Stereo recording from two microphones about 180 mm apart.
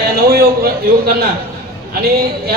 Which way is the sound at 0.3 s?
55° right (ahead or behind).